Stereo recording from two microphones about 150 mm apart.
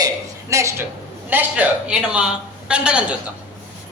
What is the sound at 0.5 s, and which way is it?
A woman's voice, 20° right (ahead or behind).